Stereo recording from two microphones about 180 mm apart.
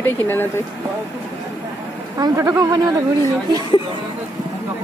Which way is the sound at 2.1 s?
20° right (ahead or behind).